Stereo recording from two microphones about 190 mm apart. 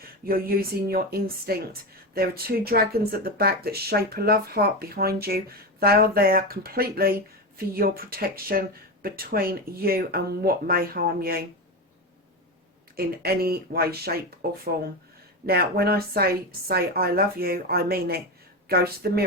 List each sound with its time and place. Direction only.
0.0 s speech: 50° right (ahead or behind)
13.0 s speech: 55° right (ahead or behind)